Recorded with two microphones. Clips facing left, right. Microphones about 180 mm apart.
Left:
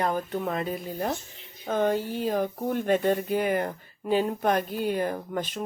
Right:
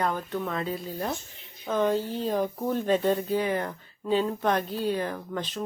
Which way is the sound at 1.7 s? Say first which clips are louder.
Even; 55° left (ahead or behind).